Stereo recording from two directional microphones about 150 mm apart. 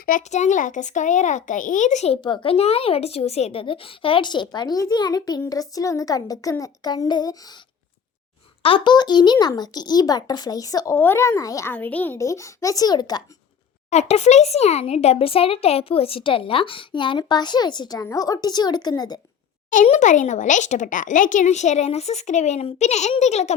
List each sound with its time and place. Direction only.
0.0 s speech: 60° left (ahead or behind)
2.2 s speech: 35° left (ahead or behind)
8.6 s speech: 35° left (ahead or behind)
13.9 s a child's voice: 50° left (ahead or behind); by 19.2 s 25° left (ahead or behind)
19.7 s speech: 55° left (ahead or behind)